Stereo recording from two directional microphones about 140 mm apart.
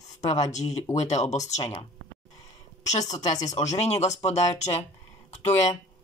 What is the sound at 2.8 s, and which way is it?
Speech, 55° left (ahead or behind).